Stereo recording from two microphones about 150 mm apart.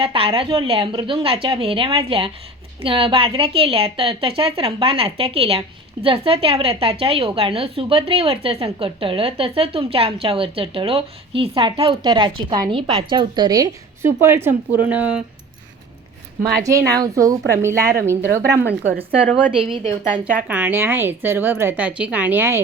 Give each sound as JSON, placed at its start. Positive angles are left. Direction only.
{"t": 0.0, "sound": "a woman's voice", "side_deg": -40}
{"t": 16.6, "sound": "a woman's voice", "side_deg": -20}
{"t": 19.6, "sound": "a woman's voice", "side_deg": -40}
{"t": 20.5, "sound": "speech", "side_deg": -10}